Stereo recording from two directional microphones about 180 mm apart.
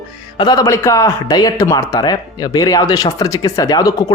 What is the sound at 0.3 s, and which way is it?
Speech, 20° left (ahead or behind).